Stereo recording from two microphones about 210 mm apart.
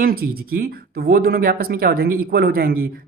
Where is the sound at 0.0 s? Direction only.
45° right (ahead or behind).